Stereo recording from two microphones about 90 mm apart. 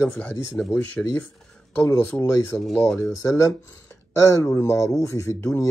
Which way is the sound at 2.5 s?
15° left (ahead or behind).